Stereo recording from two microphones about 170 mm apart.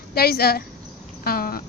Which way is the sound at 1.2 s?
60° left (ahead or behind).